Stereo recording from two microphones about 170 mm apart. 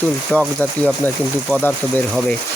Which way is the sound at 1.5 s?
5° left (ahead or behind).